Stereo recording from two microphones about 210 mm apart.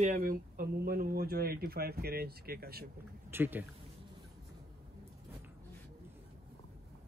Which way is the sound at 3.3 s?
10° right (ahead or behind).